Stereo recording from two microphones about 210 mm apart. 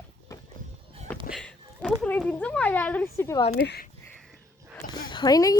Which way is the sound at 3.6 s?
50° left (ahead or behind).